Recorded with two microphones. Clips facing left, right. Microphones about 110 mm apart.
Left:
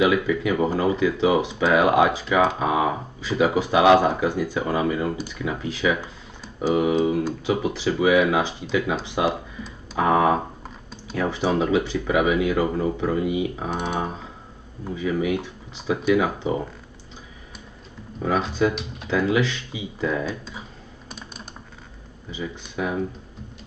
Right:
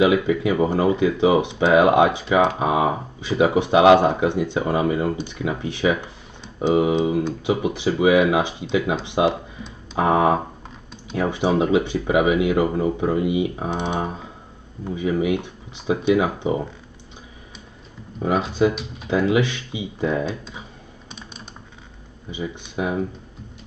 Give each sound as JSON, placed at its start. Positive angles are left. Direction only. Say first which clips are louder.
{"t": 0.0, "sound": "speech", "louder": "right 2 dB", "side_deg": -25}
{"t": 13.7, "sound": "speech", "louder": "right 2 dB", "side_deg": 5}
{"t": 15.0, "sound": "speech", "louder": "right 2 dB", "side_deg": -20}
{"t": 19.0, "sound": "speech", "louder": "right 2 dB", "side_deg": -20}
{"t": 22.3, "sound": "speech", "louder": "right 2 dB", "side_deg": -20}